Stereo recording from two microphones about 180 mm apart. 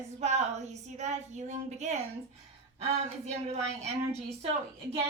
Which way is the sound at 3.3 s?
35° right (ahead or behind).